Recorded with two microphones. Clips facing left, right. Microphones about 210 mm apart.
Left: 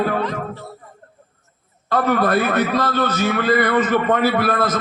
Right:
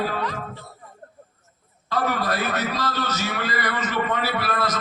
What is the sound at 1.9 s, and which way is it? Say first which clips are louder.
A man's voice: left 7 dB; 55° left (ahead or behind).